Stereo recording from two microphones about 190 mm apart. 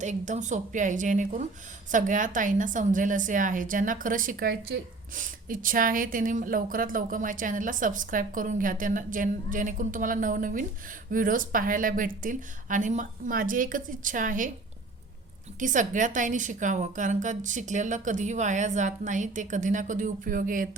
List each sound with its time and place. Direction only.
0.0 s a woman's voice: 40° right (ahead or behind)
15.5 s a woman's voice: 40° right (ahead or behind)